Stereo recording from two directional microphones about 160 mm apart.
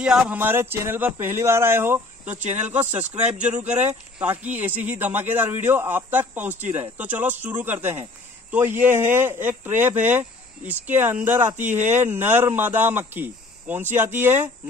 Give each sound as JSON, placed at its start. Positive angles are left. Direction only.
{"t": 0.0, "sound": "speech", "side_deg": -10}
{"t": 2.2, "sound": "speech", "side_deg": -45}
{"t": 3.0, "sound": "speech", "side_deg": -10}